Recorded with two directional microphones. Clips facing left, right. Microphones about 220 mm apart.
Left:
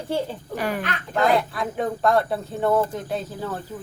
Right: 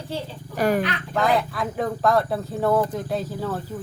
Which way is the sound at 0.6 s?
45° right (ahead or behind).